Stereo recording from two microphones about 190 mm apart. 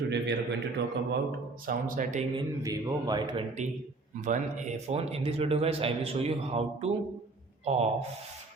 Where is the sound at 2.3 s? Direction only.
20° right (ahead or behind).